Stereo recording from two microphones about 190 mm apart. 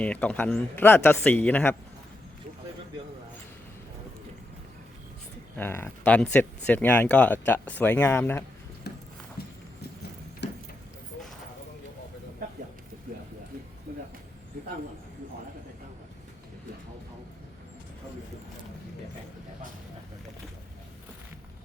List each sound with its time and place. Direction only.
0.0 s a man's voice: 5° left (ahead or behind)
5.5 s a man's voice: 10° left (ahead or behind)
8.9 s a sound: 60° left (ahead or behind)
10.4 s keys jangling: 65° left (ahead or behind)